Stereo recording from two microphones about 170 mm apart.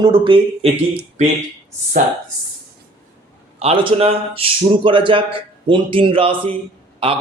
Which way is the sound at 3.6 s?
35° right (ahead or behind).